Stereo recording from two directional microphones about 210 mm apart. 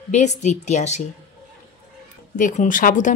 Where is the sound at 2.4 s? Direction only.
35° left (ahead or behind).